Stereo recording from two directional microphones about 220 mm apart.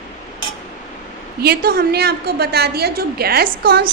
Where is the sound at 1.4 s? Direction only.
45° right (ahead or behind).